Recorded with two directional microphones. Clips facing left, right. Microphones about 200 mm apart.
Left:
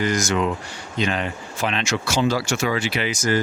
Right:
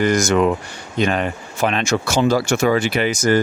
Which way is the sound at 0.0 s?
55° right (ahead or behind).